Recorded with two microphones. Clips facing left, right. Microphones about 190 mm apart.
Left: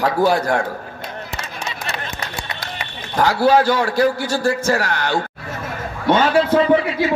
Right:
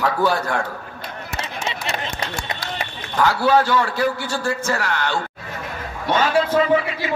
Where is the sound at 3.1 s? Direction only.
35° left (ahead or behind).